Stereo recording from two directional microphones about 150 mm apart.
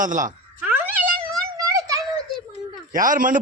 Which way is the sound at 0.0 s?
60° right (ahead or behind).